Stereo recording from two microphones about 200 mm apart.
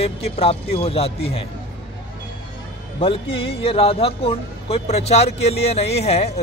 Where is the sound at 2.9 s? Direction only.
30° left (ahead or behind).